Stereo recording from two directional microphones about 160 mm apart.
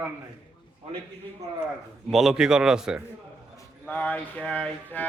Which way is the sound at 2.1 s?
Centre (ahead or behind).